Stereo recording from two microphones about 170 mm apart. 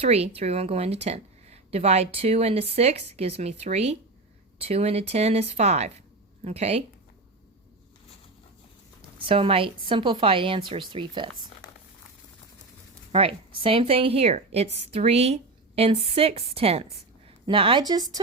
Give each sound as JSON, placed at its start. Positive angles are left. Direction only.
{"t": 0.0, "sound": "a woman's voice", "side_deg": -35}
{"t": 9.1, "sound": "a woman's voice", "side_deg": -30}
{"t": 13.1, "sound": "a woman's voice", "side_deg": -35}